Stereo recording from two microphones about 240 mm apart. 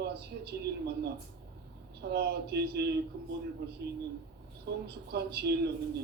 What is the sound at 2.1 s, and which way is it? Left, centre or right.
Speech, right.